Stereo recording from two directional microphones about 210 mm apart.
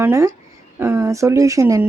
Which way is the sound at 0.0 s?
15° right (ahead or behind).